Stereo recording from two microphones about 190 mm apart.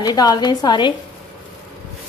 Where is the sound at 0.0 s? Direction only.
20° left (ahead or behind).